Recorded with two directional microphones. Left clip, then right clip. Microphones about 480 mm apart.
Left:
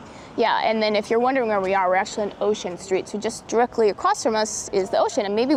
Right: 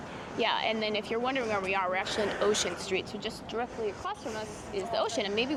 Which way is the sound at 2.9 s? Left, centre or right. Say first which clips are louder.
Left 9 dB; left.